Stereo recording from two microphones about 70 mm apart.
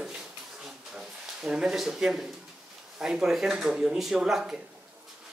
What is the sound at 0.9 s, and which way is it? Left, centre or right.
Speech, centre.